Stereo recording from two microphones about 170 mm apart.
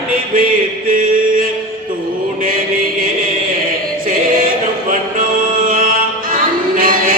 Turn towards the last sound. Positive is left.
turn(degrees=-55)  # may be behind; listen again after turning